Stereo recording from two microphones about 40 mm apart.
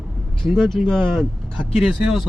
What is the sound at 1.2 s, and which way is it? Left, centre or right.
Speech, centre.